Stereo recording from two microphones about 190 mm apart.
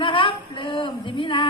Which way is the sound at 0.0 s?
25° left (ahead or behind).